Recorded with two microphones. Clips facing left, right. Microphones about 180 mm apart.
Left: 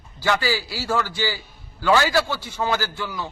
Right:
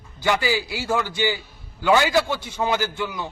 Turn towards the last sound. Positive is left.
turn(degrees=-20)  # may be behind; listen again after turning